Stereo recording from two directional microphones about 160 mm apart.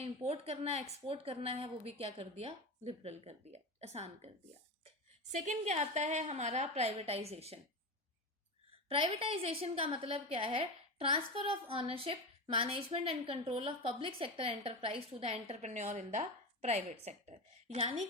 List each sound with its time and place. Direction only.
0.0 s a woman's voice: 40° right (ahead or behind)
5.5 s a woman's voice: 45° right (ahead or behind)
8.9 s a woman's voice: 35° right (ahead or behind)